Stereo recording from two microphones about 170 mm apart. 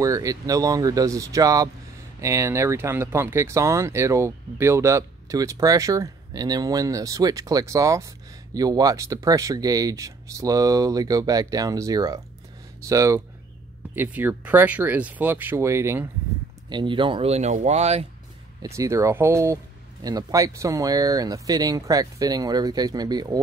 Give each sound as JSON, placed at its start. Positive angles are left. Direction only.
{"t": 0.0, "sound": "speech", "side_deg": -20}
{"t": 16.6, "sound": "speech", "side_deg": -25}
{"t": 18.6, "sound": "speech", "side_deg": -20}